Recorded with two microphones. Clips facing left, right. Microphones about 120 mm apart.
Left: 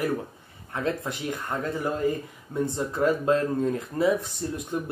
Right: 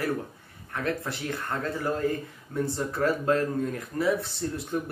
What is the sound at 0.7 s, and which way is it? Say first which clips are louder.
Speech: left 2 dB; 20° left (ahead or behind).